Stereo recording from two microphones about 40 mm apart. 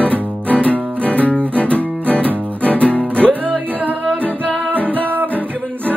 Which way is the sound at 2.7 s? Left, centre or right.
Left.